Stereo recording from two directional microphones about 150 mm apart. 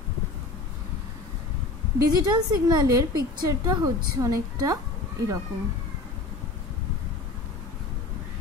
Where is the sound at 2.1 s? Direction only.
25° right (ahead or behind).